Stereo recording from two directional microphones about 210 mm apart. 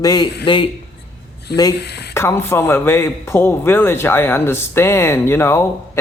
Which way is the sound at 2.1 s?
10° left (ahead or behind).